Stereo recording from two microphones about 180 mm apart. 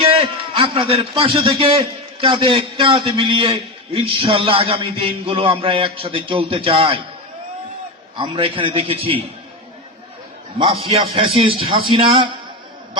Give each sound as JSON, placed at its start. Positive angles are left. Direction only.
{"t": 0.0, "sound": "a man's voice", "side_deg": -30}
{"t": 8.1, "sound": "a man's voice", "side_deg": -30}
{"t": 10.6, "sound": "a man's voice", "side_deg": -30}